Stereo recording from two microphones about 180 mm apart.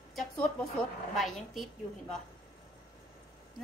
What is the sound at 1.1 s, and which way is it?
A woman's voice, centre (ahead or behind).